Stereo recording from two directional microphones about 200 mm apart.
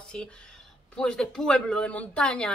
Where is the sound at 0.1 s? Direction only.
5° left (ahead or behind).